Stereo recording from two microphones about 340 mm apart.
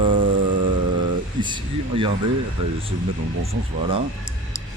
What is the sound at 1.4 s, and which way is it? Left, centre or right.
Speech, centre.